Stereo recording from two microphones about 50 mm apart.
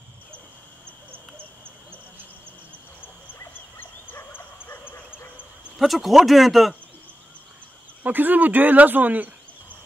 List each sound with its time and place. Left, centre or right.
3.8 s dog: left
5.8 s speech: centre
8.0 s speech: right